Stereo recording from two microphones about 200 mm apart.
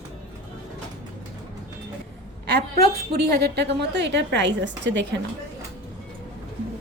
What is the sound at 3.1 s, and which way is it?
A woman's voice, 55° right (ahead or behind).